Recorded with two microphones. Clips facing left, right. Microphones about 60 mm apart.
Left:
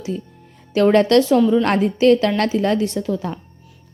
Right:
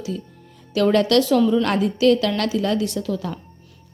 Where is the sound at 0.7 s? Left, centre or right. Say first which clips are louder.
Left 4 dB; left.